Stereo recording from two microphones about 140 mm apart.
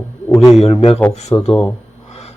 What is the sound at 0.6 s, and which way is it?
Speech, 45° left (ahead or behind).